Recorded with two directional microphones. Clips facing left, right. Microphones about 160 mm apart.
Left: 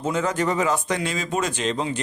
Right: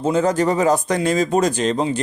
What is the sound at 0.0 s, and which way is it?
Speech, 35° right (ahead or behind).